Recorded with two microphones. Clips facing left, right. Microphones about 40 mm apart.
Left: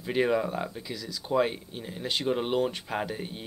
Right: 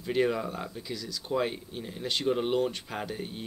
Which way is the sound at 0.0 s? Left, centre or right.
Centre.